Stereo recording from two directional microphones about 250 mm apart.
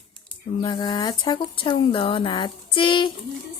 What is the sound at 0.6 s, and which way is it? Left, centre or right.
Speech, centre.